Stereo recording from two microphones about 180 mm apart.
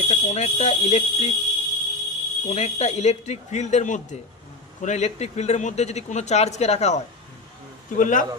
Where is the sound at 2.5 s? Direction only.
40° left (ahead or behind).